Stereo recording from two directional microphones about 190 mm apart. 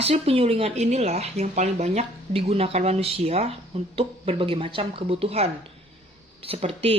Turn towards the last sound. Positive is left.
turn(degrees=-30)  # may be behind; listen again after turning